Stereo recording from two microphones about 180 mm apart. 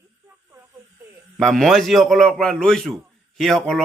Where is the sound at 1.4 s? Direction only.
Centre (ahead or behind).